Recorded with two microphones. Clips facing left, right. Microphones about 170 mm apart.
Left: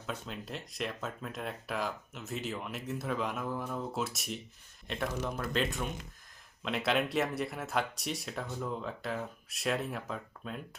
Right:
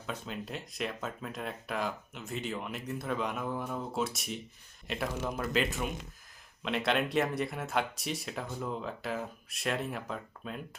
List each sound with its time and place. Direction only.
0.0 s speech: centre (ahead or behind)